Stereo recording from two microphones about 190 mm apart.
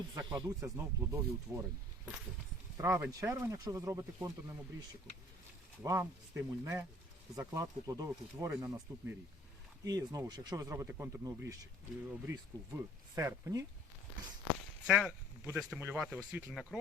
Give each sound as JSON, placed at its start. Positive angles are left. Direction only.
{"t": 0.1, "sound": "speech", "side_deg": -20}
{"t": 2.7, "sound": "speech", "side_deg": -15}
{"t": 5.8, "sound": "speech", "side_deg": -15}
{"t": 14.8, "sound": "speech", "side_deg": -5}